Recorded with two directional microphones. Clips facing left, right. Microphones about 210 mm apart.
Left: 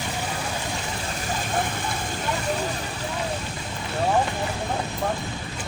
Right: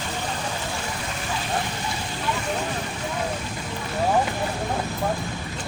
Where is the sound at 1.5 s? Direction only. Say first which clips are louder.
Left 3 dB; 50° left (ahead or behind).